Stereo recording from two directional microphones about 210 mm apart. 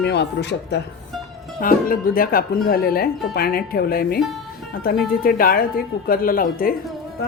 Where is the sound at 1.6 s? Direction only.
45° left (ahead or behind).